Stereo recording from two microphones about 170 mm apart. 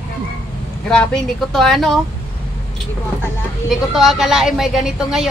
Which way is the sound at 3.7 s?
Centre (ahead or behind).